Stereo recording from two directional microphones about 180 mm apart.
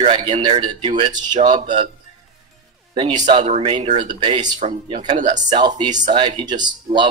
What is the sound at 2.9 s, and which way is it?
Speech, 30° right (ahead or behind).